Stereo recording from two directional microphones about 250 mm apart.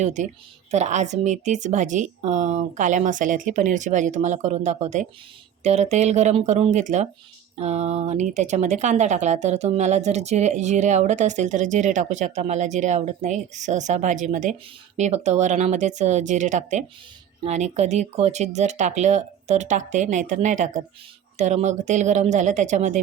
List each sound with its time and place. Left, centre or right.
0.0 s speech: right